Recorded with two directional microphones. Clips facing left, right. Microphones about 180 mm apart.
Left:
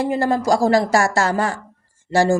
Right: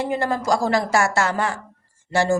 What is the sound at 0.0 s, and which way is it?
A woman's voice, 35° left (ahead or behind).